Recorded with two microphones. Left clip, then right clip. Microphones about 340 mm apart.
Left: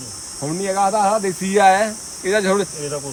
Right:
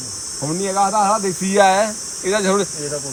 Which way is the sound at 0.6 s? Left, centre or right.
Centre.